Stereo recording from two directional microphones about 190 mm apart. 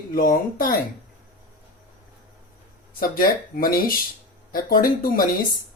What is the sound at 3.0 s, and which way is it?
Speech, 50° left (ahead or behind).